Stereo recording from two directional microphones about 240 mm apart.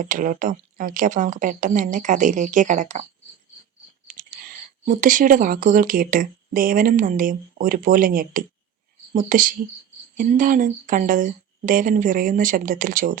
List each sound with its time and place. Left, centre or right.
0.0 s speech: right